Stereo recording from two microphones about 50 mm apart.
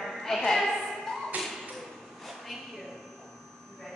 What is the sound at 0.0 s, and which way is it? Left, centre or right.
Music, centre.